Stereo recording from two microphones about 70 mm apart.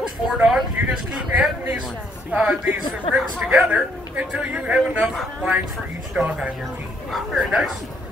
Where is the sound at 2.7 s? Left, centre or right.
Right.